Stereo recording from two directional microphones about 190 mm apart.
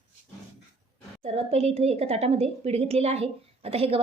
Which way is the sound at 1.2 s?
35° right (ahead or behind).